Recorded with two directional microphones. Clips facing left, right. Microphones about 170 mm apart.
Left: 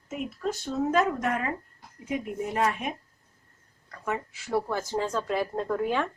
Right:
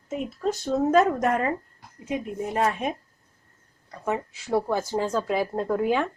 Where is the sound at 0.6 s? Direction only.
40° right (ahead or behind).